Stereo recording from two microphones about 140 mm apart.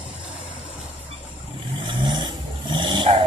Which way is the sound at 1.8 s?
35° right (ahead or behind).